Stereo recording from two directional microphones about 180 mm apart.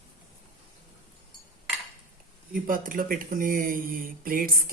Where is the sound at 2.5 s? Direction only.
50° right (ahead or behind).